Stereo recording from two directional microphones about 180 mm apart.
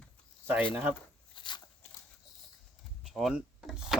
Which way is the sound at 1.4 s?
25° left (ahead or behind).